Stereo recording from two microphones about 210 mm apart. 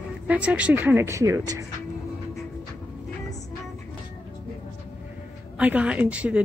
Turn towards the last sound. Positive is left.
turn(degrees=-5)  # may be behind; listen again after turning